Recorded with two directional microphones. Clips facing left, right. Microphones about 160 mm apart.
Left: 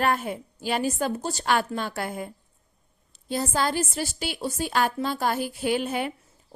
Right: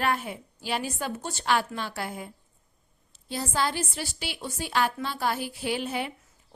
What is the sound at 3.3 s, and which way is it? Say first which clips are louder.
Speech: left 3 dB; 45° left (ahead or behind).